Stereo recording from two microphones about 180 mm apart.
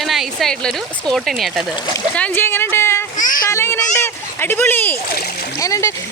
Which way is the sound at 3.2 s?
50° left (ahead or behind).